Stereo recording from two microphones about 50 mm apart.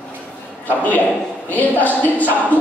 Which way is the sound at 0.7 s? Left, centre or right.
Left.